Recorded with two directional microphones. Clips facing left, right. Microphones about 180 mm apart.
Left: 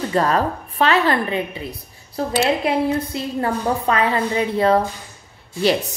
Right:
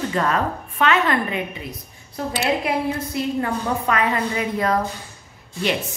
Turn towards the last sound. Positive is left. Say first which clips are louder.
# left 5 dB
turn(degrees=35)  # may be behind; listen again after turning